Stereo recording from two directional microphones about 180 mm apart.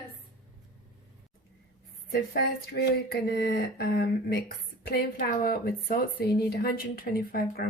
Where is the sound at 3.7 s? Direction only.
60° left (ahead or behind).